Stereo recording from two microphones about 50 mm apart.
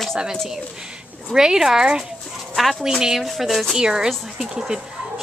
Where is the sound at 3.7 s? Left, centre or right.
Centre.